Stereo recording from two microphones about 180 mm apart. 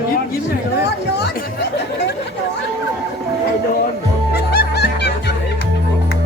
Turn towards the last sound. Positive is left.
turn(degrees=65)  # may be behind; listen again after turning